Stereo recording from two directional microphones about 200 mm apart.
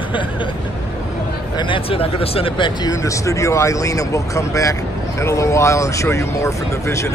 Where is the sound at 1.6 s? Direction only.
25° left (ahead or behind).